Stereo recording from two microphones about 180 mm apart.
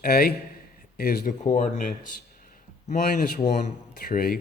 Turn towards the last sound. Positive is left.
turn(degrees=55)  # may be behind; listen again after turning